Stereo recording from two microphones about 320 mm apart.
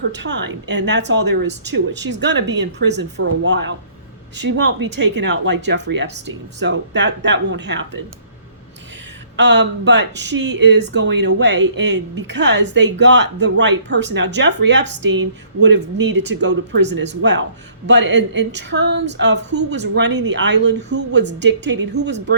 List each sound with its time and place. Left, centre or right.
0.1 s speech: right
9.3 s speech: right